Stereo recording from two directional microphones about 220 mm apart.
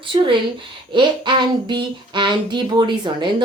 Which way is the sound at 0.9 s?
20° right (ahead or behind).